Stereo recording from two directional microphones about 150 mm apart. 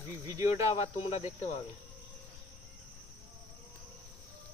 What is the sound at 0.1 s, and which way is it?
Speech, 20° right (ahead or behind).